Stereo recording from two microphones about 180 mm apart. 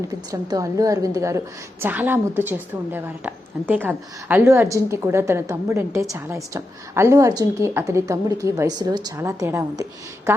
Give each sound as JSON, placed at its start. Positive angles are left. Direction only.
{"t": 0.3, "sound": "a woman's voice", "side_deg": -20}